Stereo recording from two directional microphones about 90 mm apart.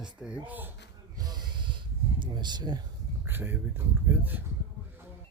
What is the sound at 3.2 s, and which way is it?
Speech, 25° right (ahead or behind).